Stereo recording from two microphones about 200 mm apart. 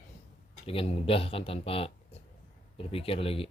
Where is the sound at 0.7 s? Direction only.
30° left (ahead or behind).